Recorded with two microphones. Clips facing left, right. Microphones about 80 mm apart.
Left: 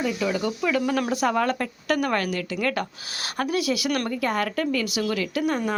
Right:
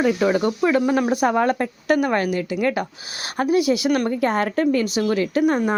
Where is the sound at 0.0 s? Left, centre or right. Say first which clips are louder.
Right 7 dB; right.